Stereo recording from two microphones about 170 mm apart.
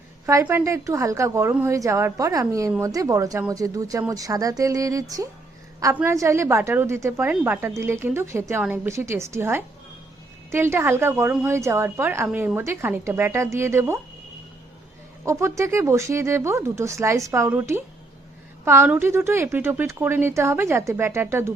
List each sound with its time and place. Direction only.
0.3 s a woman's voice: 15° right (ahead or behind)
15.2 s speech: 15° right (ahead or behind)